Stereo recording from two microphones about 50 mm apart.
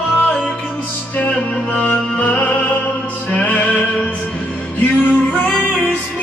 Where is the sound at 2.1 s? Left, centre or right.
Left.